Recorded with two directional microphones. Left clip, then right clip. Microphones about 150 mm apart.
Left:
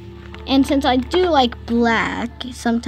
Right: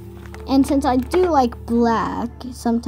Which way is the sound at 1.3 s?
20° left (ahead or behind).